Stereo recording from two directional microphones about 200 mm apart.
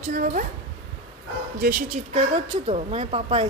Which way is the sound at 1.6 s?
45° right (ahead or behind).